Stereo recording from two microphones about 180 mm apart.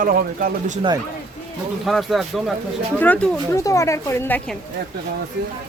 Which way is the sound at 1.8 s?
Centre (ahead or behind).